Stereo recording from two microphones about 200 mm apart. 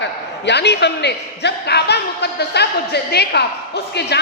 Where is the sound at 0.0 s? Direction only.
60° left (ahead or behind).